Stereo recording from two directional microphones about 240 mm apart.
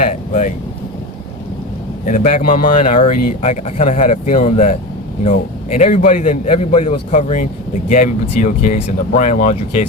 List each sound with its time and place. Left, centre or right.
0.0 s speech: left
2.0 s a man's voice: left